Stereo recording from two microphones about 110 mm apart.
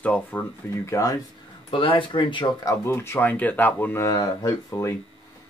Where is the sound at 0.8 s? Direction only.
30° left (ahead or behind).